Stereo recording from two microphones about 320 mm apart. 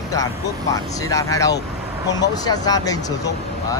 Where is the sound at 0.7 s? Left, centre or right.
Centre.